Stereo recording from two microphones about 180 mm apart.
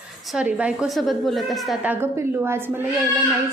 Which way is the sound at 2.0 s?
15° right (ahead or behind).